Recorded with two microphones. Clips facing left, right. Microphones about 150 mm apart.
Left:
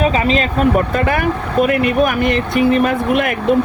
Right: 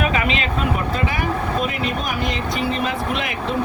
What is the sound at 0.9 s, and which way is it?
Speech, 55° left (ahead or behind).